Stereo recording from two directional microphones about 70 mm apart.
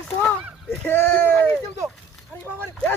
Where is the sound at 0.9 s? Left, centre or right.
Left.